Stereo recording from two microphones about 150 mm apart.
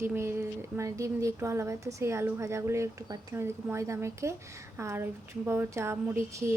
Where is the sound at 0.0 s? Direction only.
15° right (ahead or behind).